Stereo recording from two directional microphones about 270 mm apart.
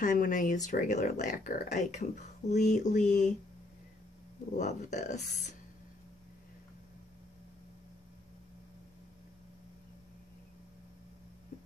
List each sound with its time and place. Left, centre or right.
0.0 s speech: left
4.6 s speech: left